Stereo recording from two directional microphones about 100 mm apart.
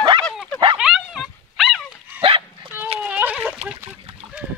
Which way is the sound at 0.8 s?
5° right (ahead or behind).